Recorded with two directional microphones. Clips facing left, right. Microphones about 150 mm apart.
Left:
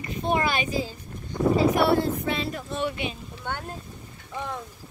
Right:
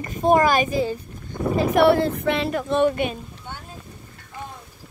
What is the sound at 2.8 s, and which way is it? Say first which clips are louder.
Speech: right 5 dB; 50° right (ahead or behind).